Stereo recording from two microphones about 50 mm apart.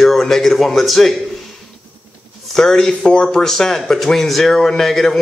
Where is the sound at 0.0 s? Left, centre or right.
Centre.